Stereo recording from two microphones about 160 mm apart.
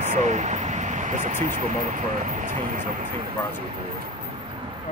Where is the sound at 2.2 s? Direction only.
55° right (ahead or behind).